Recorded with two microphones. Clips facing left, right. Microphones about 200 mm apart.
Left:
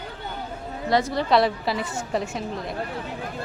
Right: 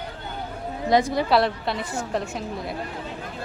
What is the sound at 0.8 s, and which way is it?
Speech, 15° right (ahead or behind).